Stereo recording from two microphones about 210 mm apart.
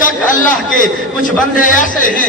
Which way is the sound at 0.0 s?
40° left (ahead or behind).